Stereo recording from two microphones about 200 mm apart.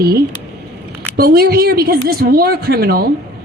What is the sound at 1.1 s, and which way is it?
A woman's voice, 50° right (ahead or behind).